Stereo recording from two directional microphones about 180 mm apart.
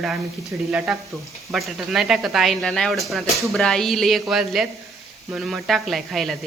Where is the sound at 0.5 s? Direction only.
5° right (ahead or behind).